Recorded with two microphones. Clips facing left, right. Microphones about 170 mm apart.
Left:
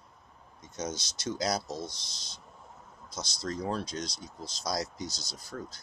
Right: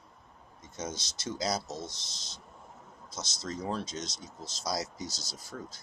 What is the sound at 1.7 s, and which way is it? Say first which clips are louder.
Speech: left 2 dB; 25° right (ahead or behind).